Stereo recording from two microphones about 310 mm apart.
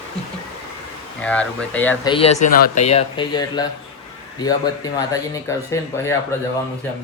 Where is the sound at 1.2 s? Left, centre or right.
Centre.